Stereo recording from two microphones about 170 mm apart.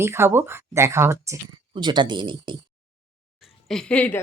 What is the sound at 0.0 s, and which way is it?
Speech, 15° right (ahead or behind).